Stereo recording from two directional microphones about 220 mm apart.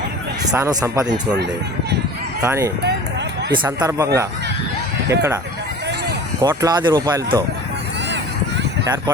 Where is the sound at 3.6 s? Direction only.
15° right (ahead or behind).